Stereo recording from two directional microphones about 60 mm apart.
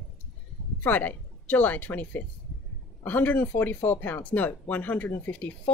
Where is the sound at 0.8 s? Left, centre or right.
Left.